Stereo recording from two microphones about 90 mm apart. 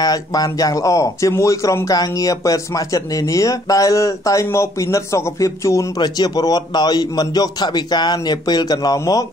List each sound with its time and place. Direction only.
0.0 s speech: 45° left (ahead or behind)
5.9 s a man's voice: 50° left (ahead or behind)